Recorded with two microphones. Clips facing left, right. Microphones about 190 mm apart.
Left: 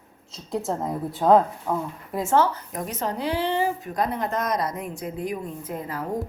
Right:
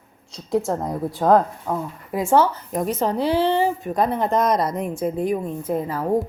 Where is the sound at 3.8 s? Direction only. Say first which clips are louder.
Right 5 dB; 25° right (ahead or behind).